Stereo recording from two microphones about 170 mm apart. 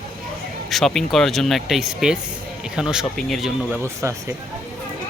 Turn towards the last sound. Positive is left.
turn(degrees=-15)  # may be behind; listen again after turning